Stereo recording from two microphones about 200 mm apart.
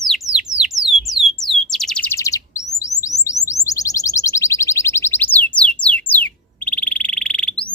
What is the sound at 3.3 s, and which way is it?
Chirp, 15° left (ahead or behind).